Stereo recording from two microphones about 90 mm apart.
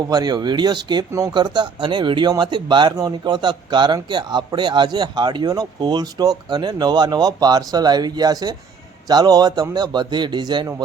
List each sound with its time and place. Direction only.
0.1 s a man's voice: 50° right (ahead or behind)
2.9 s a man's voice: 50° right (ahead or behind)